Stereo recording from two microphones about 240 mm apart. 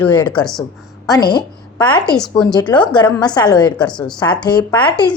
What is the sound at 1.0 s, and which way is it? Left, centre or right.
A woman's voice, centre.